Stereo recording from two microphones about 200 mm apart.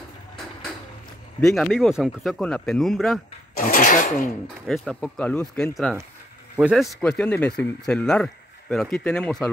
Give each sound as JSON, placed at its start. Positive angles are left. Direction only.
{"t": 1.4, "sound": "speech", "side_deg": 0}
{"t": 3.5, "sound": "speech", "side_deg": 45}
{"t": 4.6, "sound": "speech", "side_deg": 0}